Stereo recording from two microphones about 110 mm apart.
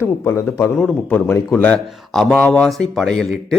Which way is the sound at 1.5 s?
10° left (ahead or behind).